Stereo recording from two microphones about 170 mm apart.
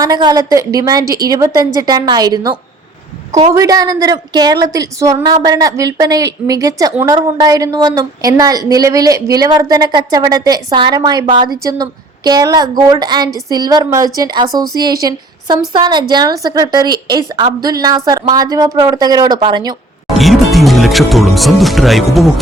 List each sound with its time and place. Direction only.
0.0 s a woman's voice: 25° right (ahead or behind)
20.1 s speech: centre (ahead or behind)